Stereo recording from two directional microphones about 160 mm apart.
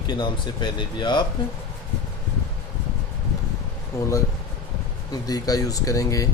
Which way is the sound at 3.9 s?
20° left (ahead or behind).